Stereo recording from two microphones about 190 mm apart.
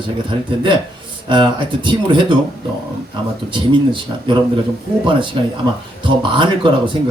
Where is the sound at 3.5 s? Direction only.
25° right (ahead or behind).